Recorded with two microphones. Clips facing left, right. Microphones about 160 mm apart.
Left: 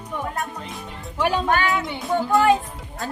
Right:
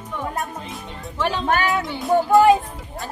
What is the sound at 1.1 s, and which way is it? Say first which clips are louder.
Speech: left 2 dB; 15° left (ahead or behind).